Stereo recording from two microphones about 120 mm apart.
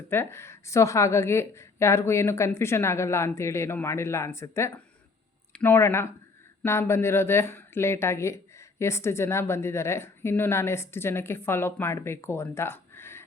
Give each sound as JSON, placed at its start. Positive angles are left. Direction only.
{"t": 0.1, "sound": "speech", "side_deg": 20}